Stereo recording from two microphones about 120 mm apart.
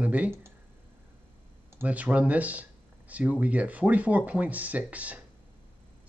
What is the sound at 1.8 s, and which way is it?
Speech, 10° right (ahead or behind).